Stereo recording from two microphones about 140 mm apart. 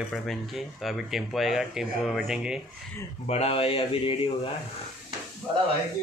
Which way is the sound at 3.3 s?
45° left (ahead or behind).